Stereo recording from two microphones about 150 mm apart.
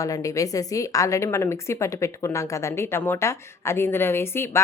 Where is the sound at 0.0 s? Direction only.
20° left (ahead or behind).